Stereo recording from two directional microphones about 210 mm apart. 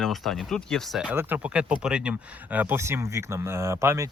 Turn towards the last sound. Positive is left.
turn(degrees=-15)  # may be behind; listen again after turning